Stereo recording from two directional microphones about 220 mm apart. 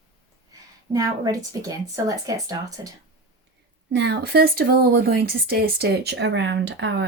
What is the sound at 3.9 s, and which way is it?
A woman's voice, 50° right (ahead or behind).